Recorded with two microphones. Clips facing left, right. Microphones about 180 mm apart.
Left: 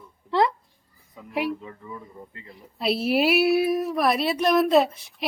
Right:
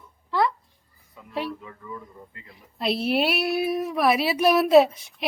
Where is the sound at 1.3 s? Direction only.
15° left (ahead or behind).